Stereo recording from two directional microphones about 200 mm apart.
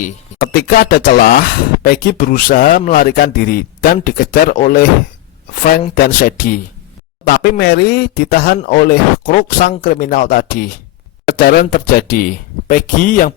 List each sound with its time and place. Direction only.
0.0 s speech: 45° left (ahead or behind)
5.9 s speech: 45° left (ahead or behind)